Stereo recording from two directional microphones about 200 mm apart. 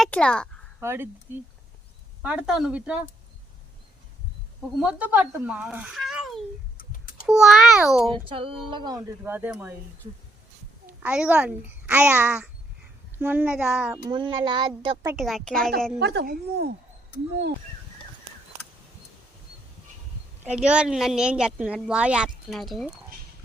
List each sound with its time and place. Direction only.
0.0 s a sound: 5° left (ahead or behind)
0.8 s a child's voice: 10° right (ahead or behind)
4.8 s a child's voice: 5° right (ahead or behind)
6.7 s a sound: 45° left (ahead or behind)
7.3 s speech: 5° right (ahead or behind)
8.1 s a sound: 25° right (ahead or behind)
9.0 s a child's voice: 10° right (ahead or behind)
10.8 s a child's voice: 5° right (ahead or behind)
14.1 s a sound: 20° right (ahead or behind)
15.1 s speech: centre (ahead or behind)
16.0 s a woman's voice: 55° right (ahead or behind)
20.6 s speech: 5° right (ahead or behind)